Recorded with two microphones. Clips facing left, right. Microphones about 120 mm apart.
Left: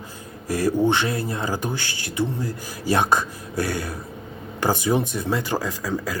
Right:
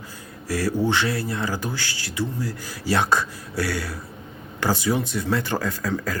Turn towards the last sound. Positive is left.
turn(degrees=10)  # may be behind; listen again after turning